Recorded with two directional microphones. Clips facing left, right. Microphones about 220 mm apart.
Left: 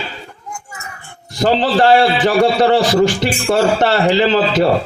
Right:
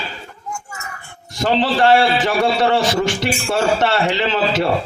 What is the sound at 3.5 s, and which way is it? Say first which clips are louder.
A man's voice: left 4 dB; 35° left (ahead or behind).